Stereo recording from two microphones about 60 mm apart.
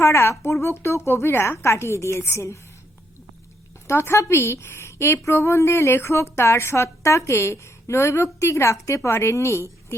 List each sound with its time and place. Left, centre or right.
0.0 s a woman's voice: left
3.8 s a woman's voice: left